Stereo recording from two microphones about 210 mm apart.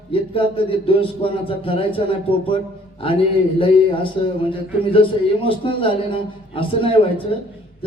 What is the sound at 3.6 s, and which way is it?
A man's voice, 25° left (ahead or behind).